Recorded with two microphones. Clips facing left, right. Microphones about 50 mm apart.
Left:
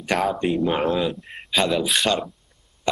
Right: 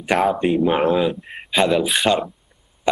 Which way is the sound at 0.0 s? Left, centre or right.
Centre.